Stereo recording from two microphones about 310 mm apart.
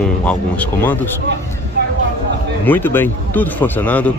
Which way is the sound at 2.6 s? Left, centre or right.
Centre.